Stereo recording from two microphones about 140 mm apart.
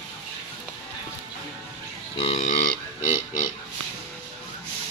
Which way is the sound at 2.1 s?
50° left (ahead or behind).